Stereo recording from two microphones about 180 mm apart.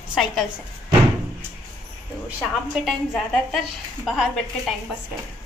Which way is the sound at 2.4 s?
Centre (ahead or behind).